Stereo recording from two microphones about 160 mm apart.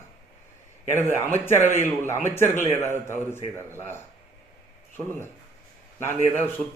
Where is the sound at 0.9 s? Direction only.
15° left (ahead or behind).